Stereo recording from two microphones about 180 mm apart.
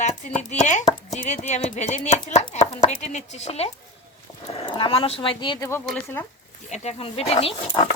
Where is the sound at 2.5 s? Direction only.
40° left (ahead or behind).